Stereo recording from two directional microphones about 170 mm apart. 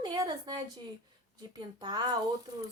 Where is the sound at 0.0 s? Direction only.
25° right (ahead or behind).